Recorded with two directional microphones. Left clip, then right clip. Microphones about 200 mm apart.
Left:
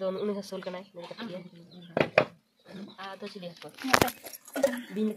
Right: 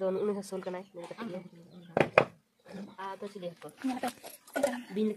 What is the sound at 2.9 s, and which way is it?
Speech, 10° right (ahead or behind).